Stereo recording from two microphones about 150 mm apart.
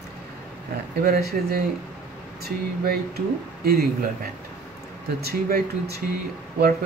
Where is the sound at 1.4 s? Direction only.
65° right (ahead or behind).